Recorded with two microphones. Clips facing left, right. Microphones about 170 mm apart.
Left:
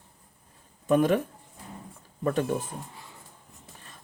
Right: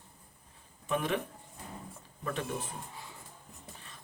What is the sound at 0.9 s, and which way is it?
Speech, 45° left (ahead or behind).